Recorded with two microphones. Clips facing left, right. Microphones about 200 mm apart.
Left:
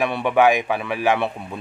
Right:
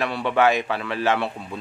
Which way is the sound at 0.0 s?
15° left (ahead or behind).